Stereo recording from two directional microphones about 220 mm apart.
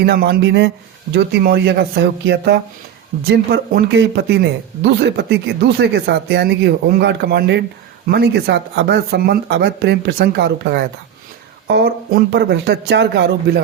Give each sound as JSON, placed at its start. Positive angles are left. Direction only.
{"t": 0.0, "sound": "speech", "side_deg": -45}